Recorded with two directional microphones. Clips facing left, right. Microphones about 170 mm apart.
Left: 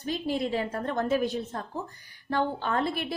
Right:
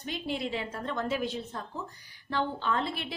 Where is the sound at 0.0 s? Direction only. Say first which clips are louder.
Left 5 dB; 40° left (ahead or behind).